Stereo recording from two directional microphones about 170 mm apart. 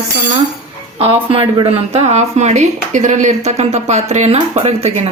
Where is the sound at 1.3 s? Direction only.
30° right (ahead or behind).